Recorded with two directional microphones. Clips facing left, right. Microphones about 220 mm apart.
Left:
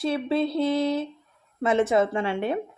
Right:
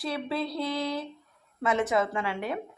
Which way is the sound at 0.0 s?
25° left (ahead or behind).